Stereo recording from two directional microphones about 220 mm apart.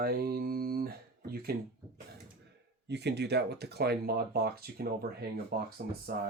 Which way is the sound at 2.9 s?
50° right (ahead or behind).